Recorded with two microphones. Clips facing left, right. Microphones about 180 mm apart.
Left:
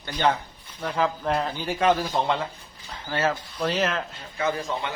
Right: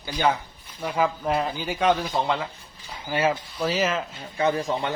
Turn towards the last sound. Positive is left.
turn(degrees=-35)  # may be behind; listen again after turning